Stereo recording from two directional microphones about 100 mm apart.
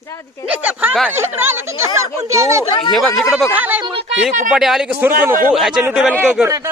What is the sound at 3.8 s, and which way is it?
Speech, 60° right (ahead or behind).